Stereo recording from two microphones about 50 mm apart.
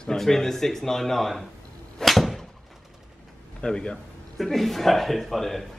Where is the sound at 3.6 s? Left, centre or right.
Centre.